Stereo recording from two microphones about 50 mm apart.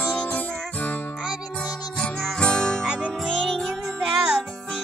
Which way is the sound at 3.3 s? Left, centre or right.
Centre.